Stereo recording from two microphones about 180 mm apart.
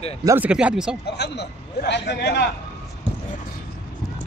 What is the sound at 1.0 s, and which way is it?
A man's voice, 65° left (ahead or behind).